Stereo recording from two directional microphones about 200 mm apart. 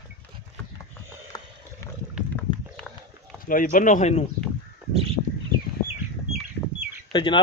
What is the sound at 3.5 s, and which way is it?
Speech, 40° left (ahead or behind).